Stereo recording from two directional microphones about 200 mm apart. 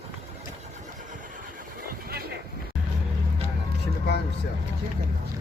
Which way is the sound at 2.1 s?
50° right (ahead or behind).